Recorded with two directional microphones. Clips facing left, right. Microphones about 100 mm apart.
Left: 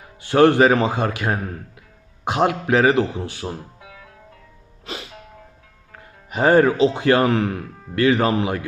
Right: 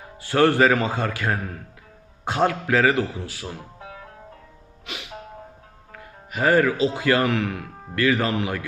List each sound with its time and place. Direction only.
0.2 s a man's voice: 20° left (ahead or behind)
3.8 s music: 30° right (ahead or behind)
4.9 s music: 35° left (ahead or behind)
6.0 s a man's voice: 25° left (ahead or behind)